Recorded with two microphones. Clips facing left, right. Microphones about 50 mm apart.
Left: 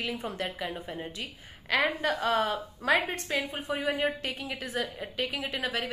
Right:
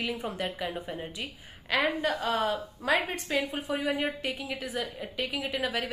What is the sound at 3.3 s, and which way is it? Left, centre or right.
Speech, centre.